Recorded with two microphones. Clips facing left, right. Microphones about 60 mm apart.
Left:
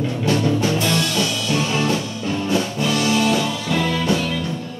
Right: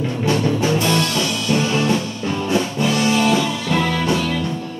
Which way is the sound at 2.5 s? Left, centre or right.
Right.